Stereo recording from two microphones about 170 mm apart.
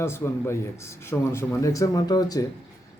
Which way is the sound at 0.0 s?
15° left (ahead or behind).